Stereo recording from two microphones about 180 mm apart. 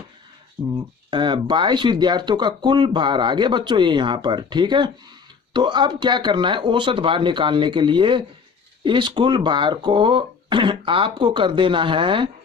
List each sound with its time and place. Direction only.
0.7 s speech: 25° right (ahead or behind)